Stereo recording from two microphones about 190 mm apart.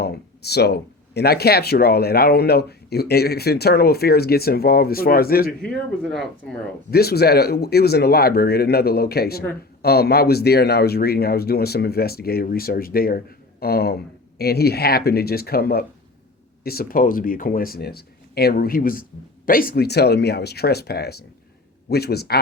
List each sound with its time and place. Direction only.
0.0 s speech: 60° left (ahead or behind)
5.7 s speech: centre (ahead or behind)
6.9 s speech: 55° left (ahead or behind)